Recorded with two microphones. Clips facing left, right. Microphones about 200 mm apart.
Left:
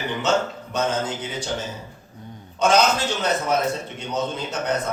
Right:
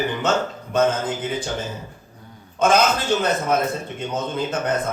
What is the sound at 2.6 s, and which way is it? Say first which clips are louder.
Speech: right 1 dB; 55° right (ahead or behind).